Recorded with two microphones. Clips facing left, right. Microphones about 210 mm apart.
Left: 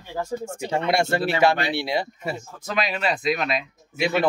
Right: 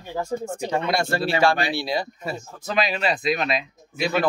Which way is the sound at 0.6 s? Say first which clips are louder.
Left 3 dB; 25° left (ahead or behind).